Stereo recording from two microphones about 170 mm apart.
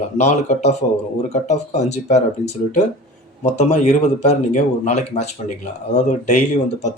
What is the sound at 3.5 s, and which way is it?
Speech, 45° left (ahead or behind).